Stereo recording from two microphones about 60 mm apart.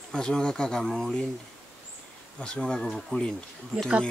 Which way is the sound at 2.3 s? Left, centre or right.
Centre.